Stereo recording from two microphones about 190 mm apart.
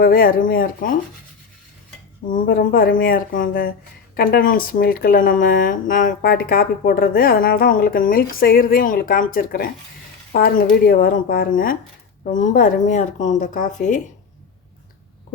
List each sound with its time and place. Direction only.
0.0 s speech: 50° left (ahead or behind)
2.3 s speech: 45° left (ahead or behind)